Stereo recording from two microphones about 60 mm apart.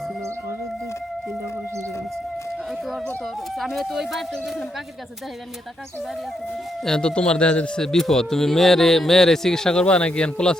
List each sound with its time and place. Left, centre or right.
3.7 s speech: centre
6.8 s speech: centre
7.9 s speech: centre